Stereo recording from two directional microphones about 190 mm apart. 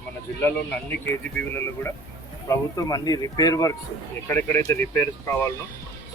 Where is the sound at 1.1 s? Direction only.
10° left (ahead or behind).